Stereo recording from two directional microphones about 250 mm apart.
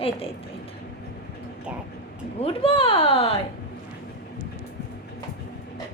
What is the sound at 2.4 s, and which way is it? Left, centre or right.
A child's voice, left.